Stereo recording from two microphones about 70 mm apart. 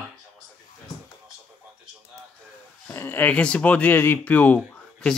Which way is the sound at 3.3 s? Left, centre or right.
Centre.